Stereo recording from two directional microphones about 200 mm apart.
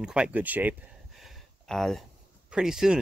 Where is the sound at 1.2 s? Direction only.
Centre (ahead or behind).